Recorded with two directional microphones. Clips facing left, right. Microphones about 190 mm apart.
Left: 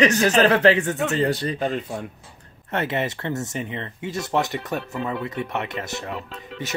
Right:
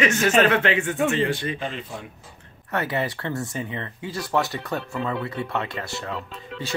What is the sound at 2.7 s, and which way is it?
Speech, 25° left (ahead or behind).